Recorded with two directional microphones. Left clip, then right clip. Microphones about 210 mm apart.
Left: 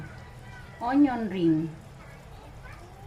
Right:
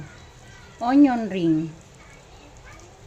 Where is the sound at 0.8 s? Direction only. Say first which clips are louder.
Right 6 dB; 40° right (ahead or behind).